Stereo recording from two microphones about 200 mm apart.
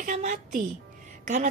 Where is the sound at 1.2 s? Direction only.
40° right (ahead or behind).